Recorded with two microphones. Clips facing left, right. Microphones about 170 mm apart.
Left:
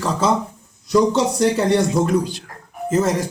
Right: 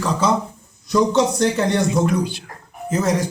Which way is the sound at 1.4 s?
5° left (ahead or behind).